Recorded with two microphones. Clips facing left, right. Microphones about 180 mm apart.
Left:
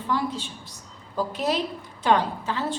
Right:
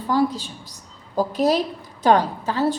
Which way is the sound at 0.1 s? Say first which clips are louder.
Right 7 dB; 40° right (ahead or behind).